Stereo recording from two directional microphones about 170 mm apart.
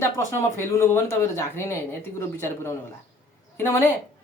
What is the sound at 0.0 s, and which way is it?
Speech, 15° left (ahead or behind).